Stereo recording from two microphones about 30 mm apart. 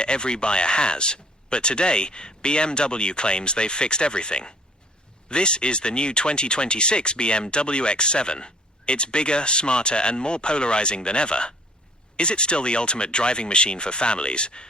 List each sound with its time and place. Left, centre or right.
0.0 s speech: left